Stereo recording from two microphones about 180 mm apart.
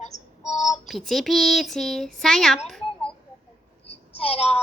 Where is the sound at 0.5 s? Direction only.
40° left (ahead or behind).